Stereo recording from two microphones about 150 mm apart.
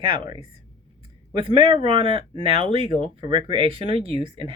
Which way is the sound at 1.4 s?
35° right (ahead or behind).